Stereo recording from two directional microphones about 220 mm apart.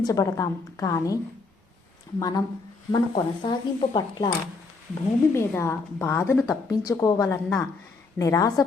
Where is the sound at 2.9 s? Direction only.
20° left (ahead or behind).